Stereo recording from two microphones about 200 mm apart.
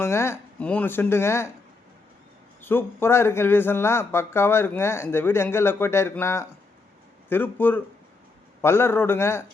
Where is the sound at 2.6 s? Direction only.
10° left (ahead or behind).